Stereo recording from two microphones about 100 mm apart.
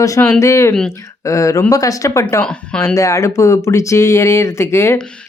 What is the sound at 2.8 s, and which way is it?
Speech, 30° left (ahead or behind).